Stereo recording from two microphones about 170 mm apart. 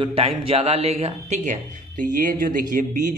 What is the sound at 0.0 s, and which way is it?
Speech, 35° right (ahead or behind).